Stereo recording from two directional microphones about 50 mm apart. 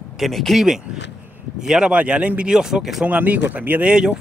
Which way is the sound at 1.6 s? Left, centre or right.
Centre.